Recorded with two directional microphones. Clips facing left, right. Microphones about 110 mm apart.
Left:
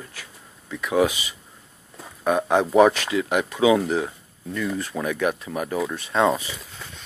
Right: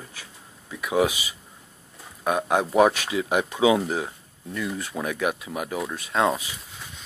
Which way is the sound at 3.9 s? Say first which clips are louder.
Left 4 dB; 5° right (ahead or behind).